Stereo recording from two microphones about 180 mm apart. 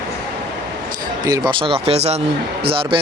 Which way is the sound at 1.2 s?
20° right (ahead or behind).